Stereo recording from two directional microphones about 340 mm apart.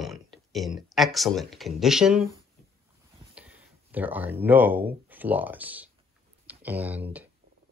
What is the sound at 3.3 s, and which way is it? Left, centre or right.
Speech, centre.